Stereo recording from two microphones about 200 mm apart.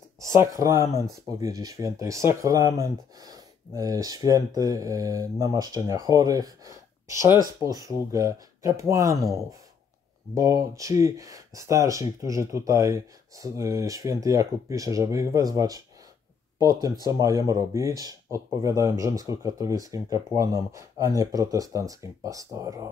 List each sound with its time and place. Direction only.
0.2 s speech: 15° right (ahead or behind)